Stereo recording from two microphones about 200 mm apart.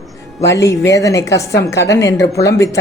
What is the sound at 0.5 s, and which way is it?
A woman's voice, 15° left (ahead or behind).